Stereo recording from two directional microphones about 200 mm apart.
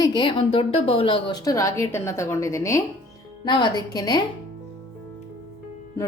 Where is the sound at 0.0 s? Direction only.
20° left (ahead or behind).